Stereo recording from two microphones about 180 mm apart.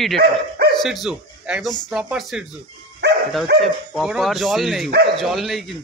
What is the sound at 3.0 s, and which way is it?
Dog, 70° right (ahead or behind).